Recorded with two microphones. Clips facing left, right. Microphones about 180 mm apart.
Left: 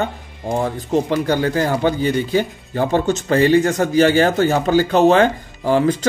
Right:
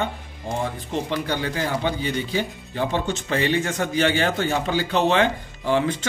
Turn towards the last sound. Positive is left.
turn(degrees=40)  # may be behind; listen again after turning